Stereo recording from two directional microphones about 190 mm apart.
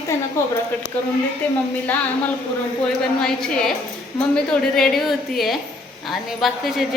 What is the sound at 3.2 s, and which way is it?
Speech, 5° left (ahead or behind).